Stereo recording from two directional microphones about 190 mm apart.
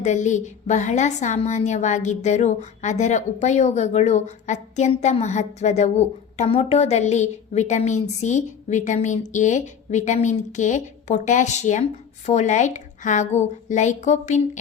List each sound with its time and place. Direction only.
0.0 s a woman's voice: 40° left (ahead or behind)